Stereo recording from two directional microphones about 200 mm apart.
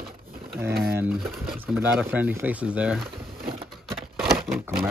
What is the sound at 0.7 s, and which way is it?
Speech, 55° right (ahead or behind).